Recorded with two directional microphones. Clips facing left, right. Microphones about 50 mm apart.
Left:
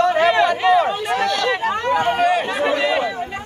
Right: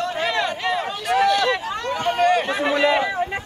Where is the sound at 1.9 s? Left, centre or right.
Centre.